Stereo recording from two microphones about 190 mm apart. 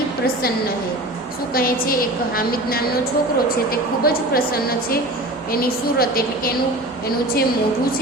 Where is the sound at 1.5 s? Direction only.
50° left (ahead or behind).